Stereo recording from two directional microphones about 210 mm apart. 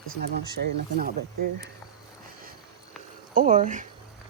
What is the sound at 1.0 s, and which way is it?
Speech, 45° right (ahead or behind).